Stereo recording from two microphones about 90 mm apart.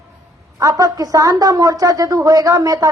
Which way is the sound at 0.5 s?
40° right (ahead or behind).